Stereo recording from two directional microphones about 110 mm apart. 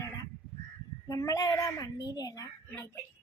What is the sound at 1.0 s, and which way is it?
A child's voice, 30° left (ahead or behind).